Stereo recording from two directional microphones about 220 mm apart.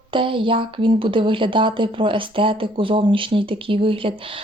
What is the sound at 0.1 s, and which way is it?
Speech, 25° right (ahead or behind).